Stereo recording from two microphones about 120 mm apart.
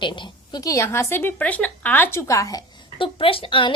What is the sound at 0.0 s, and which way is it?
A woman's voice, 40° left (ahead or behind).